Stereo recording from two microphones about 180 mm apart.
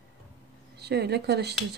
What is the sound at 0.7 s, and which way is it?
Speech, 65° right (ahead or behind).